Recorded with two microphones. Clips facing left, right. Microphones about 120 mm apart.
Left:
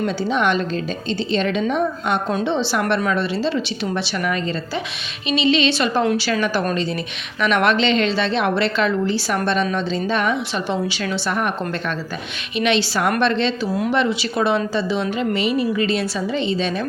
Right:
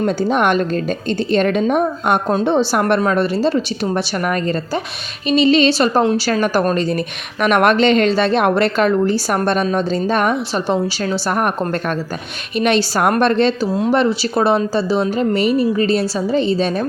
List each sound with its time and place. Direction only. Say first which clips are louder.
0.0 s a woman's voice: right 4 dB; 50° right (ahead or behind)